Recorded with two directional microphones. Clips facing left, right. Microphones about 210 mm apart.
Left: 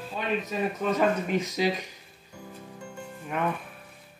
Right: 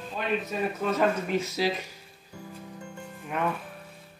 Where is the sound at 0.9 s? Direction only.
15° left (ahead or behind).